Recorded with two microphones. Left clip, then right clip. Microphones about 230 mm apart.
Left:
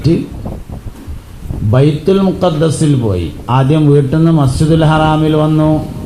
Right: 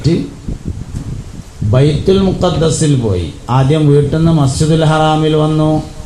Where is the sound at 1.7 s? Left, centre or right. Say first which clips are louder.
Even; left.